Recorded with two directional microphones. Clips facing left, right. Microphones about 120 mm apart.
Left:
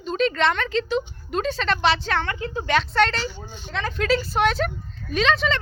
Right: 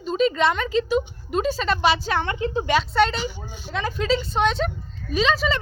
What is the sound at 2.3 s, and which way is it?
Speech, 20° right (ahead or behind).